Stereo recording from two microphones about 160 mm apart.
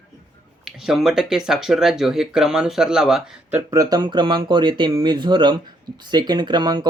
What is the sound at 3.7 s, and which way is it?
Speech, 25° right (ahead or behind).